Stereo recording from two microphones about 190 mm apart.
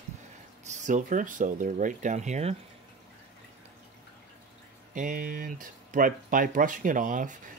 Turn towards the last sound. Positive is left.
turn(degrees=-45)  # may be behind; listen again after turning